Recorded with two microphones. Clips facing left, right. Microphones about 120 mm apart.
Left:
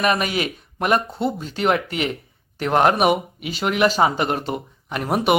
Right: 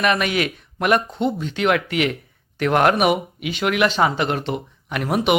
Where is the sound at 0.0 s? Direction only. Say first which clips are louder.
Right 1 dB; 35° left (ahead or behind).